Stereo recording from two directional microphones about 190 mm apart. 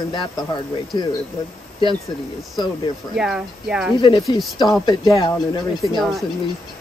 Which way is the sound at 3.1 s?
5° right (ahead or behind).